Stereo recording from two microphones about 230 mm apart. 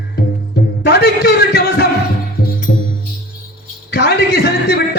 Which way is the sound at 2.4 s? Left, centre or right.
Left.